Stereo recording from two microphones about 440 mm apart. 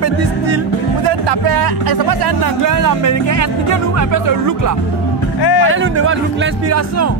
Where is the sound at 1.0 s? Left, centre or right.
Right.